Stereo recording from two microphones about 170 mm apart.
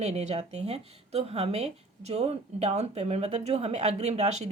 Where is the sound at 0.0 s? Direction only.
40° right (ahead or behind).